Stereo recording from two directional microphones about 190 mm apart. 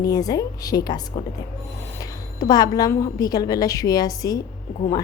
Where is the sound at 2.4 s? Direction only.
20° left (ahead or behind).